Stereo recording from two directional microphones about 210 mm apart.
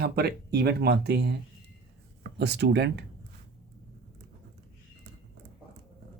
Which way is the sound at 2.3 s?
55° right (ahead or behind).